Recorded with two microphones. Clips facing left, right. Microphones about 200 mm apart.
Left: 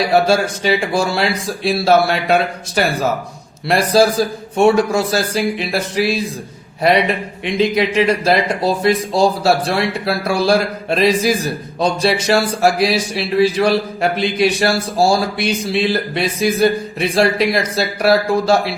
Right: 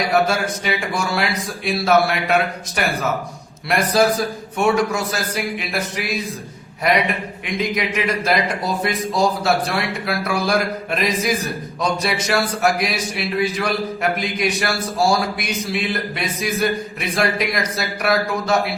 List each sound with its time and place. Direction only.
0.1 s speech: 30° left (ahead or behind)